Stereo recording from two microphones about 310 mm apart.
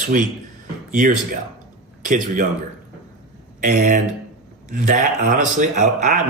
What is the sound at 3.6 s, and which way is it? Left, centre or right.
Speech, right.